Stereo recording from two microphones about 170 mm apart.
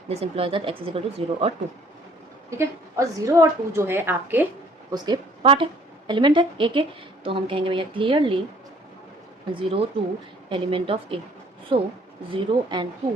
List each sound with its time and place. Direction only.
0.1 s speech: 35° right (ahead or behind)
2.5 s a woman's voice: 15° right (ahead or behind)
4.9 s a woman's voice: 25° right (ahead or behind)
9.6 s a woman's voice: 30° right (ahead or behind)